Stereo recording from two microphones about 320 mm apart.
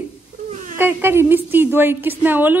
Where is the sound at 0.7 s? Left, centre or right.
Centre.